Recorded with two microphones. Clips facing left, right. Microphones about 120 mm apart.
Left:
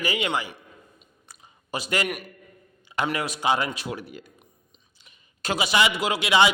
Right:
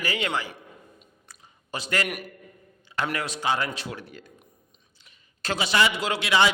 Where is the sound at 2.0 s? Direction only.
5° right (ahead or behind).